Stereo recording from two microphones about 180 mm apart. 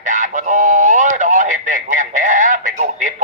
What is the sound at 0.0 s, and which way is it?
Radio, 45° right (ahead or behind).